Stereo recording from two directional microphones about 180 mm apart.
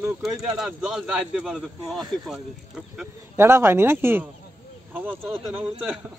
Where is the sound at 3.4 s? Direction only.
15° right (ahead or behind).